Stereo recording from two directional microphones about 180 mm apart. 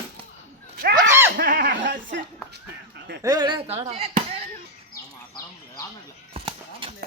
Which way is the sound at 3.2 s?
25° right (ahead or behind).